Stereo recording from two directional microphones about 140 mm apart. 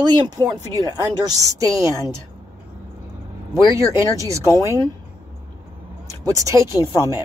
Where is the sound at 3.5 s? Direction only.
20° right (ahead or behind).